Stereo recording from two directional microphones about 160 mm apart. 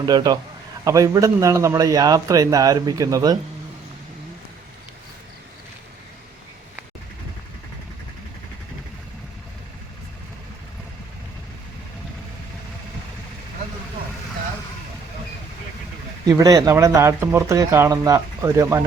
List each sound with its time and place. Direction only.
0.0 s speech: 25° right (ahead or behind)
16.2 s speech: 25° right (ahead or behind)